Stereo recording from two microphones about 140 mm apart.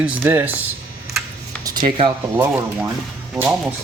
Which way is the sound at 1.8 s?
40° right (ahead or behind).